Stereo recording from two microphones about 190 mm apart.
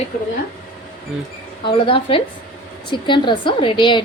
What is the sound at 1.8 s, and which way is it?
A woman's voice, 30° left (ahead or behind).